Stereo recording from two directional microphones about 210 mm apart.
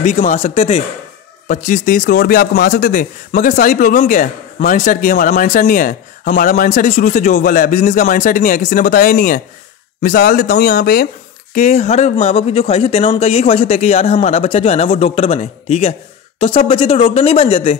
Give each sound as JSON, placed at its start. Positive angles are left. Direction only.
{"t": 0.0, "sound": "speech", "side_deg": 35}
{"t": 11.5, "sound": "speech", "side_deg": 35}